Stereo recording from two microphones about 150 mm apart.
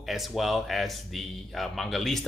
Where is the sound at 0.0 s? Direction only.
Centre (ahead or behind).